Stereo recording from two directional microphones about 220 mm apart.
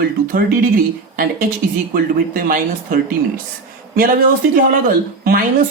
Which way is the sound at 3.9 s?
40° right (ahead or behind).